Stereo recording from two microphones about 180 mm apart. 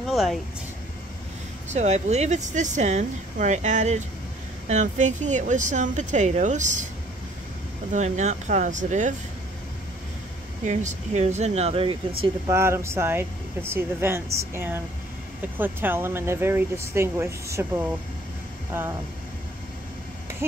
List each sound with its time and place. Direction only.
0.0 s a sound: centre (ahead or behind)
1.7 s speech: 40° right (ahead or behind)
7.9 s speech: 40° right (ahead or behind)
10.6 s speech: 40° right (ahead or behind)
12.4 s speech: 15° right (ahead or behind)